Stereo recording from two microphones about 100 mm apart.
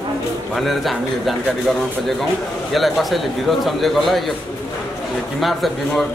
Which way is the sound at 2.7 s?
Centre (ahead or behind).